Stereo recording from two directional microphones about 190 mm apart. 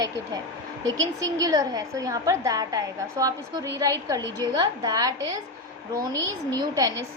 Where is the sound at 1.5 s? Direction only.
20° right (ahead or behind).